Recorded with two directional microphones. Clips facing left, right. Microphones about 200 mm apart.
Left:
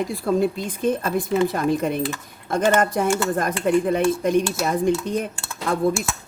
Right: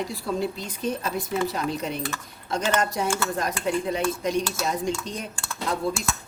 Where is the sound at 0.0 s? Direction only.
55° left (ahead or behind).